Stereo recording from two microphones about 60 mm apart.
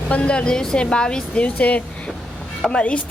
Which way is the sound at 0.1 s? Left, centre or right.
Centre.